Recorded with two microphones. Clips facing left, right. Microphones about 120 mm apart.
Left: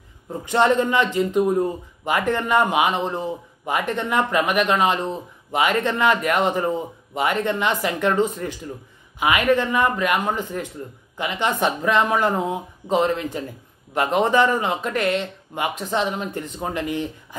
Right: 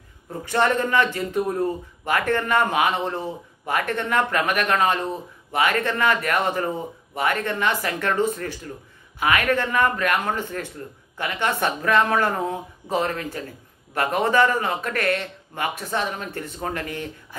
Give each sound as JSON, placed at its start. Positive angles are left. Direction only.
{"t": 0.3, "sound": "speech", "side_deg": 20}